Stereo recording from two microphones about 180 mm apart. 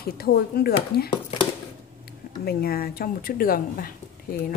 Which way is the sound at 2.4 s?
60° left (ahead or behind).